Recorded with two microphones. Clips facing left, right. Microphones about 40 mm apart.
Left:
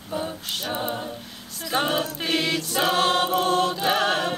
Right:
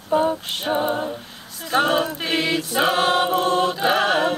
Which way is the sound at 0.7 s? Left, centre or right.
Centre.